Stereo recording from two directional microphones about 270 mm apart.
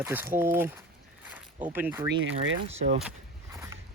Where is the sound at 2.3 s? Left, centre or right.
Right.